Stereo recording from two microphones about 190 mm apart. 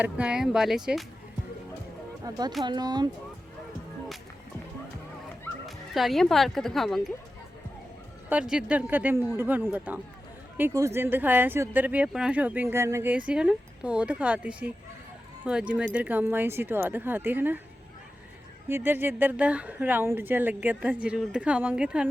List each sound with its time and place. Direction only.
0.0 s speech: 5° right (ahead or behind)
2.3 s speech: 20° right (ahead or behind)
5.6 s speech: centre (ahead or behind)
8.3 s speech: 5° right (ahead or behind)
18.7 s speech: 10° right (ahead or behind)